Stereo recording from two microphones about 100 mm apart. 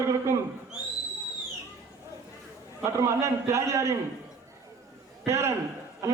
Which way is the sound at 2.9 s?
30° right (ahead or behind).